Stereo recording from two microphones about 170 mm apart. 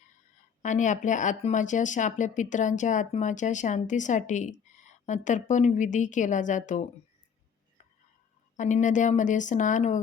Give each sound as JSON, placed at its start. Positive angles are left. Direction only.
{"t": 0.6, "sound": "speech", "side_deg": 45}
{"t": 8.5, "sound": "speech", "side_deg": 45}